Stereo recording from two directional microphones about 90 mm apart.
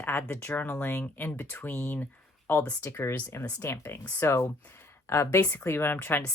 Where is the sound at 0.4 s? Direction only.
20° left (ahead or behind).